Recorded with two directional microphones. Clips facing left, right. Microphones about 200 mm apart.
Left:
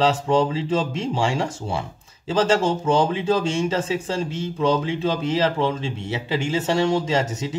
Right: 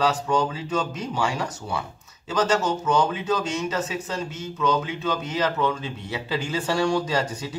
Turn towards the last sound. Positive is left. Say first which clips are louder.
# left 3 dB
turn(degrees=20)  # may be behind; listen again after turning